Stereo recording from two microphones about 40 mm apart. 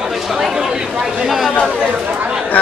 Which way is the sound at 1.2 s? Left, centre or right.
Centre.